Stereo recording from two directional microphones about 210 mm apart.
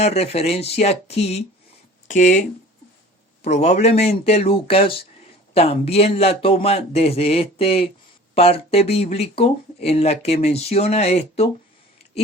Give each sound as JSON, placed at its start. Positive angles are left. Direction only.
{"t": 0.0, "sound": "speech", "side_deg": 30}
{"t": 3.5, "sound": "speech", "side_deg": 30}